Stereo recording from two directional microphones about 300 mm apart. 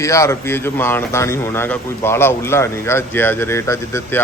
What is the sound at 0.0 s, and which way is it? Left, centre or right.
A man's voice, centre.